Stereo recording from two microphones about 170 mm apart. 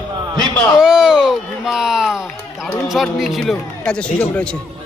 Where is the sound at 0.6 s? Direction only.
5° right (ahead or behind).